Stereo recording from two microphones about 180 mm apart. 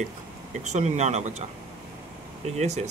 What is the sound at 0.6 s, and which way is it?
Speech, 40° right (ahead or behind).